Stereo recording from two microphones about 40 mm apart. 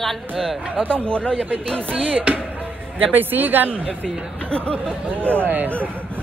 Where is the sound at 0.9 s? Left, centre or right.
Left.